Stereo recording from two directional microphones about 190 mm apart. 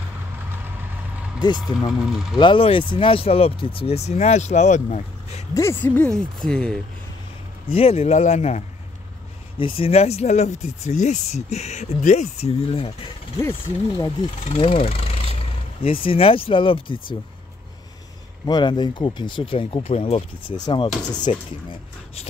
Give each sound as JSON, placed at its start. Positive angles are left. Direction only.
{"t": 2.0, "sound": "speech", "side_deg": -5}
{"t": 2.3, "sound": "speech", "side_deg": 25}
{"t": 5.5, "sound": "speech", "side_deg": 15}
{"t": 7.7, "sound": "speech", "side_deg": 30}
{"t": 13.4, "sound": "speech", "side_deg": 15}
{"t": 14.4, "sound": "speech", "side_deg": 30}
{"t": 18.4, "sound": "speech", "side_deg": 25}